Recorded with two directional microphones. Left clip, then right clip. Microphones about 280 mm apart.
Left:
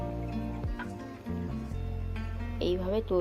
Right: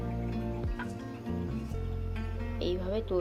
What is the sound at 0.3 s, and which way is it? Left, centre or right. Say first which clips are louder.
Music: right 1 dB; centre.